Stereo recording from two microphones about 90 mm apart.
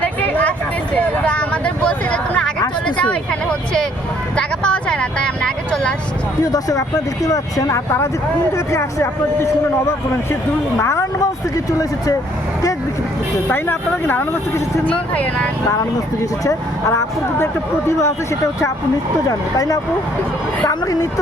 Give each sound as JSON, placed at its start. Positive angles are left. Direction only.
{"t": 0.0, "sound": "a sound", "side_deg": 20}
{"t": 4.4, "sound": "vehicle", "side_deg": 10}
{"t": 6.4, "sound": "speech", "side_deg": 40}
{"t": 13.5, "sound": "speech", "side_deg": 25}
{"t": 16.4, "sound": "speech", "side_deg": 35}
{"t": 19.3, "sound": "speech", "side_deg": 40}